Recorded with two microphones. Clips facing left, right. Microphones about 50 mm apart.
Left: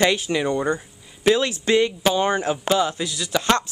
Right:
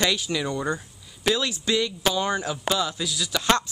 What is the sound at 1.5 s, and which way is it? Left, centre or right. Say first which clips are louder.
Speech: left 6 dB; left.